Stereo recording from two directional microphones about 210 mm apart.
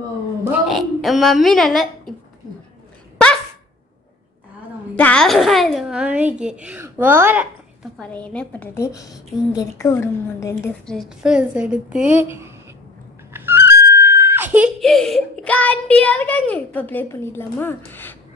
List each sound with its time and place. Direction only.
0.5 s a woman's voice: centre (ahead or behind)
4.9 s a child's voice: 5° left (ahead or behind); by 7.4 s 10° right (ahead or behind)
8.0 s a woman's voice: 5° left (ahead or behind)
11.0 s a child's voice: 5° right (ahead or behind)